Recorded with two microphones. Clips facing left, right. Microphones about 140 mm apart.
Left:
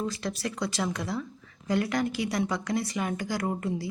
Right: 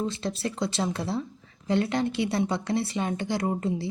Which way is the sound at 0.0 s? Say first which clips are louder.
Right 2 dB; 25° right (ahead or behind).